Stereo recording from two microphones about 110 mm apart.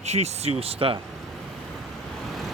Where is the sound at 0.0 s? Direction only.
85° right; by 0.9 s 60° right (ahead or behind).